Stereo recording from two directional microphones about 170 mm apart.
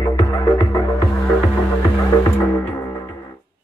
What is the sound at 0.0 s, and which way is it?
Music, 25° left (ahead or behind).